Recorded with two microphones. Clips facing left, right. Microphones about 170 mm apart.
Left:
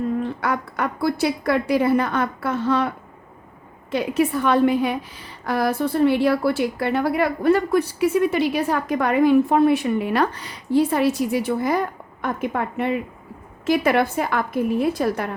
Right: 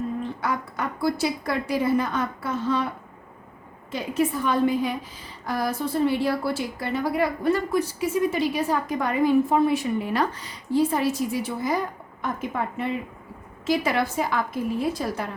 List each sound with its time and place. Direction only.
0.4 s a woman's voice: 65° left (ahead or behind)
3.9 s a woman's voice: 70° left (ahead or behind)